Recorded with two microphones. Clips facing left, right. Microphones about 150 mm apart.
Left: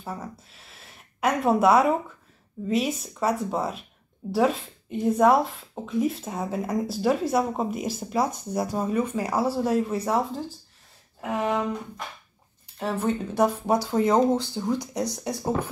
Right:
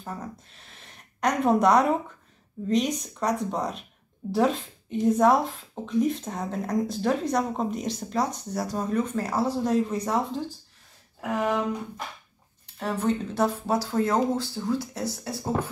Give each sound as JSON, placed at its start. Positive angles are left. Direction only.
{"t": 0.0, "sound": "a woman's voice", "side_deg": 5}
{"t": 12.7, "sound": "a woman's voice", "side_deg": 5}